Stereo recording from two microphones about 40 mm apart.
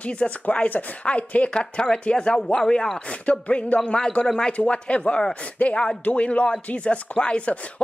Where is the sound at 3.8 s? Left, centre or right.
Centre.